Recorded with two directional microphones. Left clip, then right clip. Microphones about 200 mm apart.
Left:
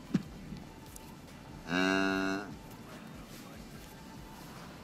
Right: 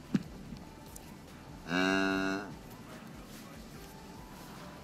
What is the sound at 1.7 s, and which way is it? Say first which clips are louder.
Music: even; 40° left (ahead or behind).